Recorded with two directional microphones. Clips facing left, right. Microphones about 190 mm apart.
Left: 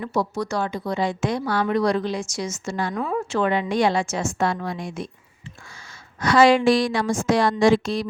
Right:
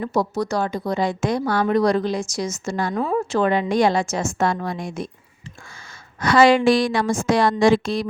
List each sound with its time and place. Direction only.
0.0 s a woman's voice: 40° right (ahead or behind)
2.9 s a woman's voice: 30° right (ahead or behind); by 5.0 s 45° right (ahead or behind)
6.1 s a woman's voice: 55° right (ahead or behind)